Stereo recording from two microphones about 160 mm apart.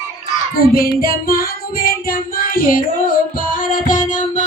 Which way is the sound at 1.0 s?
65° left (ahead or behind).